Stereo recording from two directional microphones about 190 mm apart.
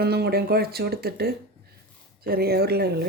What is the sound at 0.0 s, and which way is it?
Speech, 55° right (ahead or behind).